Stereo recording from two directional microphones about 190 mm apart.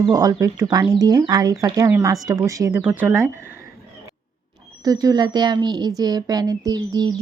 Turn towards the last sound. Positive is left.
turn(degrees=-20)  # may be behind; listen again after turning